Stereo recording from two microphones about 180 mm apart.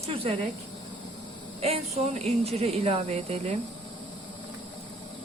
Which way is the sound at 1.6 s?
35° right (ahead or behind).